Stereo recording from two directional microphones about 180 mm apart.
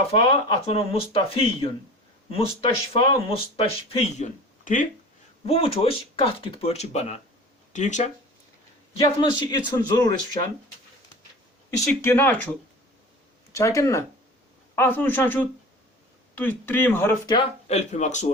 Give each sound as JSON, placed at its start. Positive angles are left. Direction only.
{"t": 0.1, "sound": "speech", "side_deg": 30}
{"t": 4.2, "sound": "speech", "side_deg": 45}
{"t": 5.5, "sound": "speech", "side_deg": 35}
{"t": 9.2, "sound": "speech", "side_deg": 25}
{"t": 11.9, "sound": "speech", "side_deg": 15}
{"t": 17.2, "sound": "speech", "side_deg": 30}